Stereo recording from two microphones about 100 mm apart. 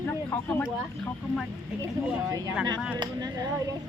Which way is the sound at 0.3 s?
20° left (ahead or behind).